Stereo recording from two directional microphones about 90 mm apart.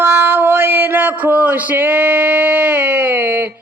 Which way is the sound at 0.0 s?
25° right (ahead or behind).